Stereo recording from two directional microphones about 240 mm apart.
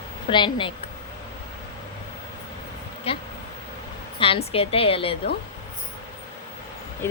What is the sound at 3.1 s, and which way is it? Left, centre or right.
A woman's voice, left.